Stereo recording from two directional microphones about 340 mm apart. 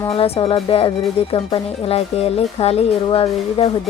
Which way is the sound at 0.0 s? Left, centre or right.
Centre.